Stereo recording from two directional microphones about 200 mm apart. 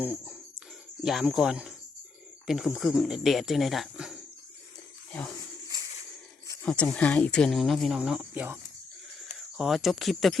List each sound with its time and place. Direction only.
0.0 s speech: 10° right (ahead or behind)
6.7 s speech: 5° left (ahead or behind)
9.6 s speech: centre (ahead or behind)